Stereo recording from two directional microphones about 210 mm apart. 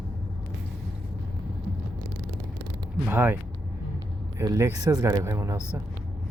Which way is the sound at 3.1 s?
10° right (ahead or behind).